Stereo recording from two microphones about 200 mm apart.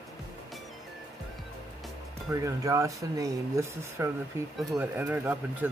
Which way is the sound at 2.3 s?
15° right (ahead or behind).